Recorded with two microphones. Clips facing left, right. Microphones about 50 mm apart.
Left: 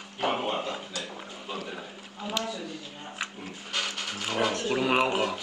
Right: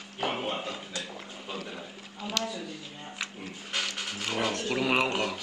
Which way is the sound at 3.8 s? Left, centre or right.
Centre.